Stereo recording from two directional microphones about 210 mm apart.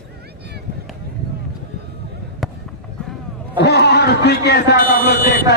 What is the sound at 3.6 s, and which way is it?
Speech, 50° left (ahead or behind).